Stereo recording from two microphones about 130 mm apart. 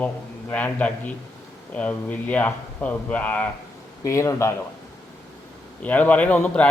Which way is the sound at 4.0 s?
25° left (ahead or behind).